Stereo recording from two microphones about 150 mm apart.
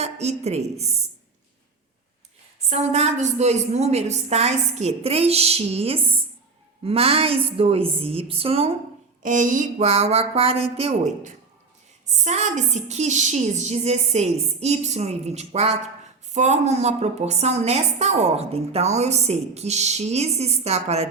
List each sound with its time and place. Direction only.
0.0 s a woman's voice: 45° right (ahead or behind)
2.6 s a woman's voice: 45° right (ahead or behind)
9.2 s a woman's voice: 55° right (ahead or behind)